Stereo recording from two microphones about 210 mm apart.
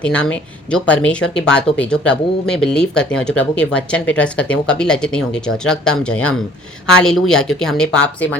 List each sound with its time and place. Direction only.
0.0 s speech: 5° left (ahead or behind)